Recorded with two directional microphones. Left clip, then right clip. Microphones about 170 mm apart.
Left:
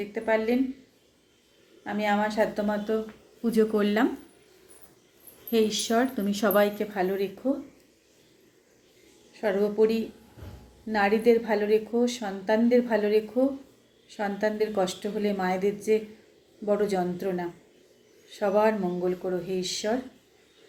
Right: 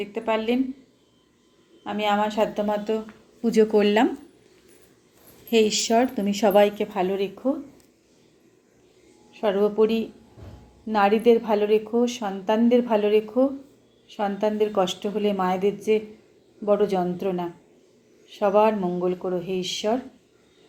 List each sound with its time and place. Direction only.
0.0 s a woman's voice: 10° right (ahead or behind)
1.8 s a woman's voice: 10° right (ahead or behind)
5.5 s a woman's voice: 15° right (ahead or behind)
9.3 s a woman's voice: 10° right (ahead or behind)